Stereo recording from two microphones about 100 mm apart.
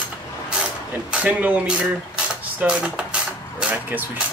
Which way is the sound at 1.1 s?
15° right (ahead or behind).